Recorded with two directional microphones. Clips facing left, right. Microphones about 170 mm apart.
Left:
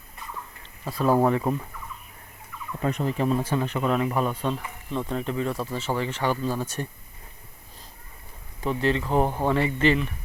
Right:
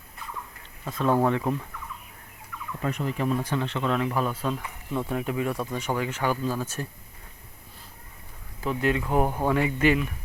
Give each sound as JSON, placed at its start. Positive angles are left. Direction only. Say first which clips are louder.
{"t": 0.9, "sound": "speech", "louder": "left 2 dB", "side_deg": 5}
{"t": 2.8, "sound": "fowl", "louder": "left 3 dB", "side_deg": 35}
{"t": 3.5, "sound": "speech", "louder": "left 2 dB", "side_deg": 10}
{"t": 6.8, "sound": "speech", "louder": "left 2 dB", "side_deg": 5}
{"t": 8.6, "sound": "speech", "louder": "left 1 dB", "side_deg": -5}